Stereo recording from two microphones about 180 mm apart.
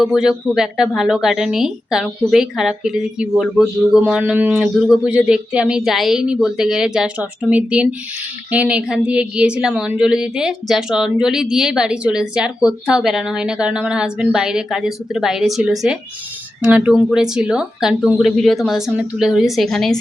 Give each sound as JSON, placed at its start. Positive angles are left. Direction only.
{"t": 0.0, "sound": "speech", "side_deg": -5}